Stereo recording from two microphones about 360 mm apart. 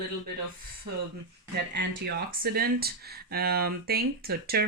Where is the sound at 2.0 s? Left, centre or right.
Right.